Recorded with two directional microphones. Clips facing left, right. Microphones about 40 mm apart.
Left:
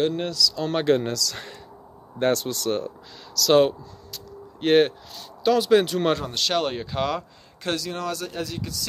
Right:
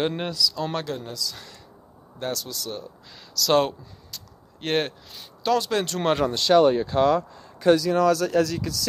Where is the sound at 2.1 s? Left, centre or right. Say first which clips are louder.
Left 8 dB; left.